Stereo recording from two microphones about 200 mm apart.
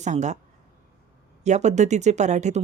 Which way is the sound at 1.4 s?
35° right (ahead or behind).